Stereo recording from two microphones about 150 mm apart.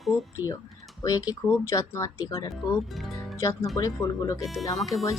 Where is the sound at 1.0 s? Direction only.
25° left (ahead or behind).